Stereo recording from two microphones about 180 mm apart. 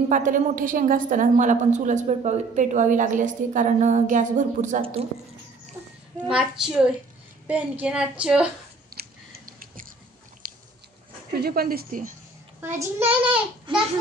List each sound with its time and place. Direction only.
0.1 s a woman's voice: 45° right (ahead or behind)
6.1 s a woman's voice: 5° right (ahead or behind)
8.9 s a sound: 55° right (ahead or behind)
10.4 s biting: 50° right (ahead or behind)
11.3 s speech: 60° right (ahead or behind)
12.5 s a child's voice: 15° right (ahead or behind)
13.7 s babbling: 30° right (ahead or behind)